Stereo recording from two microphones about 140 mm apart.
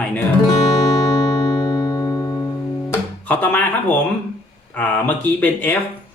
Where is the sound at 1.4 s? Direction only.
25° left (ahead or behind).